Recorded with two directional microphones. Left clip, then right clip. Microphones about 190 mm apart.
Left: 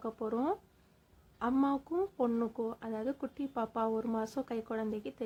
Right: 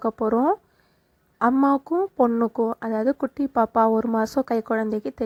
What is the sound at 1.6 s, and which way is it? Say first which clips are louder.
Speech: right 12 dB; 40° right (ahead or behind).